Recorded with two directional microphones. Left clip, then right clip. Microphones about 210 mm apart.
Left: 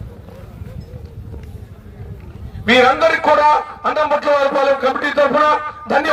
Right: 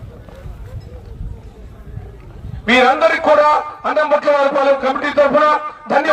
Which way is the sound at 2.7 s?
35° left (ahead or behind).